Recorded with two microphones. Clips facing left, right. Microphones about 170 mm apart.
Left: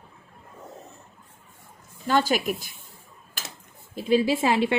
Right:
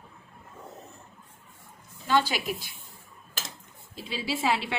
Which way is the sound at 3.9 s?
50° left (ahead or behind).